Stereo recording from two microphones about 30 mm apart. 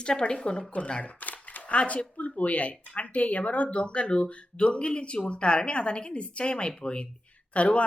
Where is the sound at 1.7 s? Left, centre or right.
Left.